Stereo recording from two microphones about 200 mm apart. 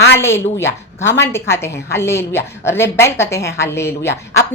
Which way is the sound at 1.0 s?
65° left (ahead or behind).